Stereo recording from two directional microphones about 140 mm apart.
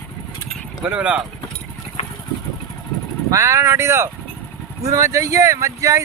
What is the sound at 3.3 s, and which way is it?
Speech, 20° right (ahead or behind).